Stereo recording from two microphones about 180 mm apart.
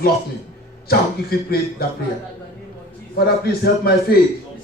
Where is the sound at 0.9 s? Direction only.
60° left (ahead or behind).